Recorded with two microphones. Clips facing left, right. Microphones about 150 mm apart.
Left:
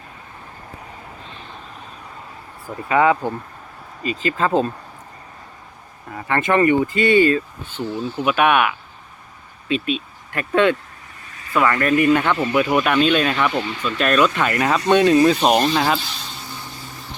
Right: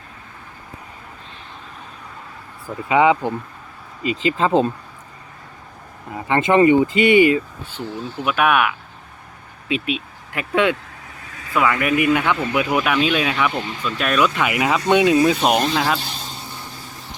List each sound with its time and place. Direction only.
2.9 s speech: 15° right (ahead or behind)
6.1 s speech: 20° right (ahead or behind)
8.2 s speech: centre (ahead or behind)
9.6 s speech: 15° right (ahead or behind)